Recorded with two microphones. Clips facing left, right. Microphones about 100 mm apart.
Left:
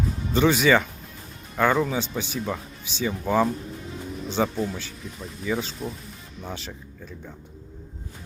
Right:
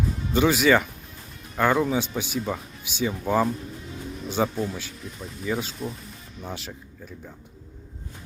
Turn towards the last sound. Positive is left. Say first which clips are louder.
# even
turn(degrees=-5)  # may be behind; listen again after turning